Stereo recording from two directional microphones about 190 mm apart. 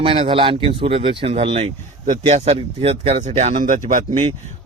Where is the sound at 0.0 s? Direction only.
30° right (ahead or behind).